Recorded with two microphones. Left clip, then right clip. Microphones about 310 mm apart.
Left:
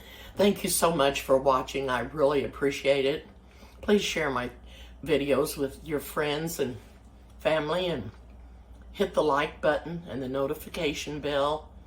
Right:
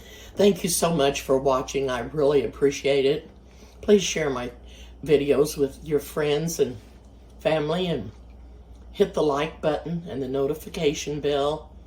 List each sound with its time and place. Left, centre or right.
0.1 s speech: centre
9.0 s speech: centre